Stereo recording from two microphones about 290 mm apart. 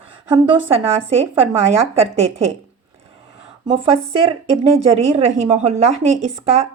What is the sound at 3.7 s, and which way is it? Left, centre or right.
Speech, centre.